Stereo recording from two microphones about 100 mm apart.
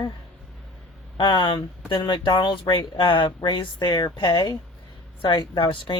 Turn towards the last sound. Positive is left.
turn(degrees=55)  # may be behind; listen again after turning